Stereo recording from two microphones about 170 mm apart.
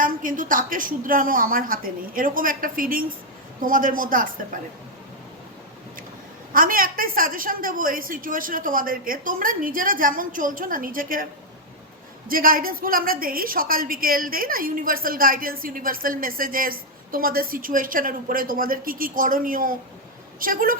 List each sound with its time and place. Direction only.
0.0 s a woman's voice: 50° right (ahead or behind)
6.5 s a woman's voice: 55° right (ahead or behind)
12.3 s a woman's voice: 55° right (ahead or behind)